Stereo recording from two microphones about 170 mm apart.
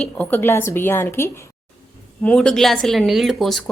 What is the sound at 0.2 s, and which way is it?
A woman's voice, 10° left (ahead or behind).